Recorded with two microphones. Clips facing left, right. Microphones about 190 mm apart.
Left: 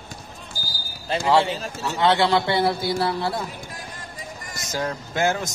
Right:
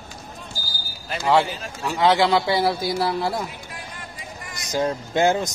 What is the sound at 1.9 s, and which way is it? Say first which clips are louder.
Speech: right 1 dB; 15° right (ahead or behind).